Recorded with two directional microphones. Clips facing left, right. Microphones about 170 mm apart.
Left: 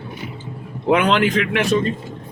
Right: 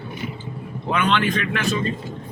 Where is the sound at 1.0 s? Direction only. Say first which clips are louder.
Left 4 dB; 80° left.